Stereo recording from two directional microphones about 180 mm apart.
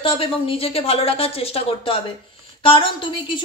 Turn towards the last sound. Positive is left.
turn(degrees=30)  # may be behind; listen again after turning